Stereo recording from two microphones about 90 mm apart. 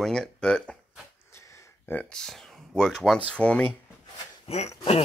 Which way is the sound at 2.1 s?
5° left (ahead or behind).